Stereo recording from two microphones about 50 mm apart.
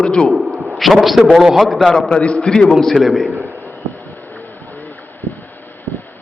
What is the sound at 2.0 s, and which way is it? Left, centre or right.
Speech, centre.